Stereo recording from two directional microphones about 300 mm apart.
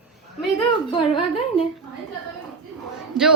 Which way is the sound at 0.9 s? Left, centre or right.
Centre.